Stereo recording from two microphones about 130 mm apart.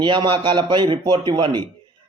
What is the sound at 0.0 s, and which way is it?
A man's voice, 35° right (ahead or behind).